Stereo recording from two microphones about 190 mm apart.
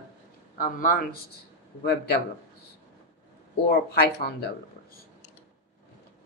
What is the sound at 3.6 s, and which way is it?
Speech, 55° left (ahead or behind).